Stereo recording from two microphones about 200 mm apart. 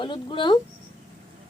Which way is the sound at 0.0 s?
25° left (ahead or behind).